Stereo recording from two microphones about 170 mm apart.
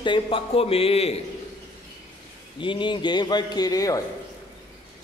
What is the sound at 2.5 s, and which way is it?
A man's voice, 30° left (ahead or behind).